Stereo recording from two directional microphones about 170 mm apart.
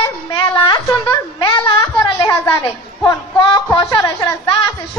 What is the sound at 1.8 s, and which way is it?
A woman's voice, 15° left (ahead or behind).